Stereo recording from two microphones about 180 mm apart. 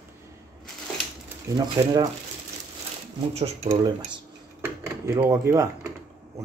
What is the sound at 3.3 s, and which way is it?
Speech, 35° right (ahead or behind).